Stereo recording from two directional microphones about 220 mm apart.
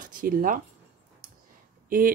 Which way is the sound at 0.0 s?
40° right (ahead or behind).